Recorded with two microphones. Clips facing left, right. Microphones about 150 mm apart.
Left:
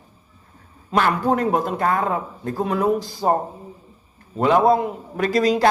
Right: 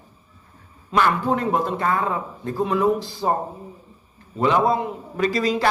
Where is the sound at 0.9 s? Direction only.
45° left (ahead or behind).